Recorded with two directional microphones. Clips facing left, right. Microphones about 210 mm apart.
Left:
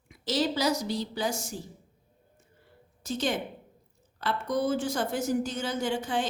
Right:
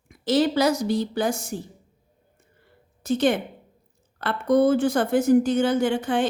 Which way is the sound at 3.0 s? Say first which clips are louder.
Right 8 dB; 60° right (ahead or behind).